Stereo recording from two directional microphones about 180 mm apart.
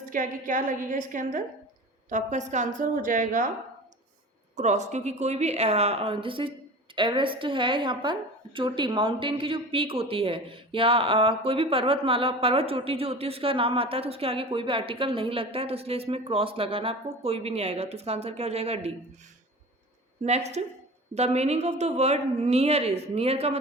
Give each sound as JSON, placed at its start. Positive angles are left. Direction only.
{"t": 0.0, "sound": "a woman's voice", "side_deg": -45}
{"t": 4.5, "sound": "a woman's voice", "side_deg": -40}
{"t": 20.2, "sound": "a woman's voice", "side_deg": -40}